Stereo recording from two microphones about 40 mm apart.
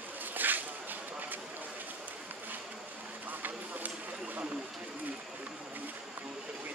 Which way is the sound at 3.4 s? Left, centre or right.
Right.